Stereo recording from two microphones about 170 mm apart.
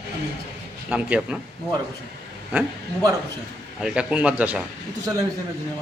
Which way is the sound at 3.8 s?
5° right (ahead or behind).